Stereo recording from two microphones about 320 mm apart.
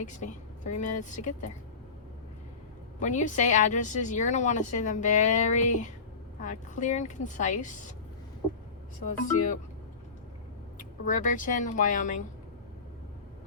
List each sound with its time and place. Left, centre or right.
0.0 s speech: left
3.0 s speech: left
9.0 s speech: left
11.0 s speech: left